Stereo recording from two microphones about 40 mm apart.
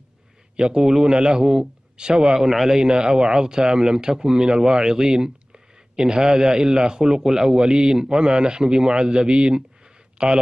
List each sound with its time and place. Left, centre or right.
0.6 s a man's voice: right